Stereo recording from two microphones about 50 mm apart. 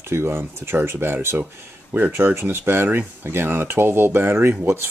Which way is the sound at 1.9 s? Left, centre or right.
Right.